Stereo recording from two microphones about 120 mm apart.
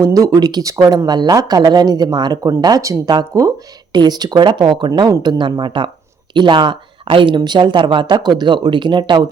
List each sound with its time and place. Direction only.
0.0 s speech: 30° right (ahead or behind)